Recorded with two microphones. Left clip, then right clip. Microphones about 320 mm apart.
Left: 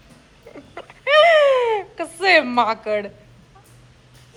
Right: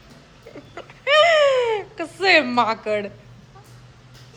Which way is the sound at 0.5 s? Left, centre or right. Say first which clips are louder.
Left 1 dB; centre.